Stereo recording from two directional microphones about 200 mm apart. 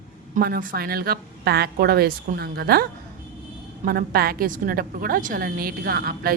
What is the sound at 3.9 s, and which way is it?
A woman's voice, 45° right (ahead or behind).